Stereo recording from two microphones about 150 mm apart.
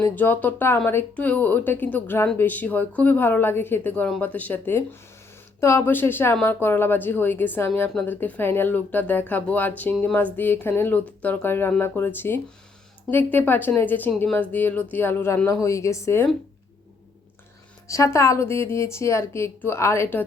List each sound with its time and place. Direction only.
0.0 s speech: 10° left (ahead or behind)
17.8 s speech: 20° left (ahead or behind)